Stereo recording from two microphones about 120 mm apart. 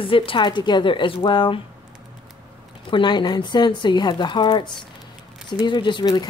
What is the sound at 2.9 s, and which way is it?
Speech, 40° left (ahead or behind).